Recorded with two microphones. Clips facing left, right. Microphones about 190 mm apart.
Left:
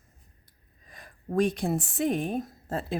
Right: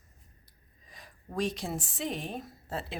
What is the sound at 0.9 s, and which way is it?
A woman's voice, 55° left (ahead or behind).